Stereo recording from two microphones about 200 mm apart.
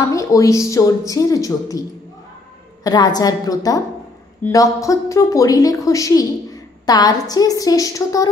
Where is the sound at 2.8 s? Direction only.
20° left (ahead or behind).